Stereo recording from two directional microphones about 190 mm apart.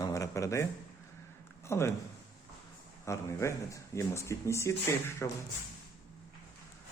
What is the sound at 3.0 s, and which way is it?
Speech, 15° left (ahead or behind).